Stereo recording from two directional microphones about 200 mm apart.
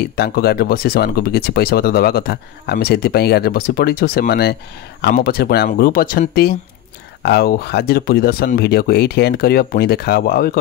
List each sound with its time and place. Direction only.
0.1 s speech: 50° left (ahead or behind)